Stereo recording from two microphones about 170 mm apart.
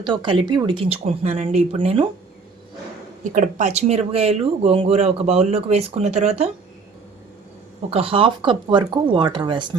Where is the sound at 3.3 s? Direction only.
45° right (ahead or behind).